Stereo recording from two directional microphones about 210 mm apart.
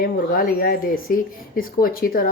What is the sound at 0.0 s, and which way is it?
Speech, 45° left (ahead or behind).